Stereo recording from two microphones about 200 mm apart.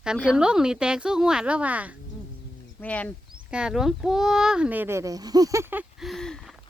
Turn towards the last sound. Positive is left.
turn(degrees=0)  # may be behind; listen again after turning